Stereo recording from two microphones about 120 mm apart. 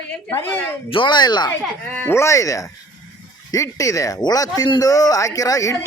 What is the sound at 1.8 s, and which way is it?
A man's voice, 15° left (ahead or behind).